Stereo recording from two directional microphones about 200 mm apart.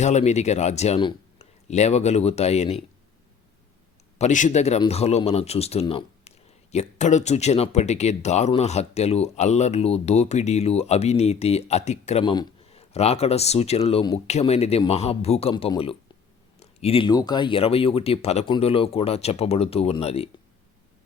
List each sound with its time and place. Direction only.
0.0 s speech: 35° left (ahead or behind)
4.2 s speech: 40° left (ahead or behind)